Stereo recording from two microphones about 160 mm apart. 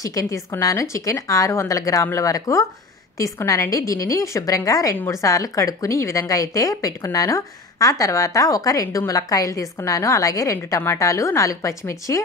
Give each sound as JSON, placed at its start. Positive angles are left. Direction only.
{"t": 0.0, "sound": "a woman's voice", "side_deg": 20}